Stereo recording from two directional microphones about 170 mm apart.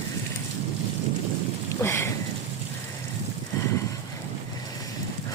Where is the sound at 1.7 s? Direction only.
15° left (ahead or behind).